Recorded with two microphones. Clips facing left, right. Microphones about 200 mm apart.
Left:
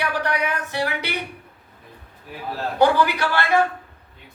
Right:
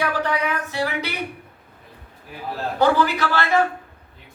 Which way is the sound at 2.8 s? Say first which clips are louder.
Left 1 dB; 15° left (ahead or behind).